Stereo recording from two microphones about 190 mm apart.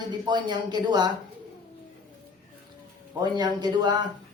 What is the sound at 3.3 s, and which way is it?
Speech, 20° right (ahead or behind).